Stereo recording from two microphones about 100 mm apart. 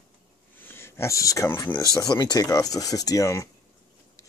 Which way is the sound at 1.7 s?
35° left (ahead or behind).